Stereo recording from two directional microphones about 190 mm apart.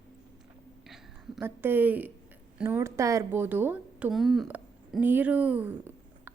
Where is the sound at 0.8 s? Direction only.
Centre (ahead or behind).